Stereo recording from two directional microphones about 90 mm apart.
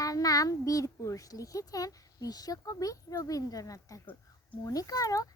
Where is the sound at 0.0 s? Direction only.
40° left (ahead or behind).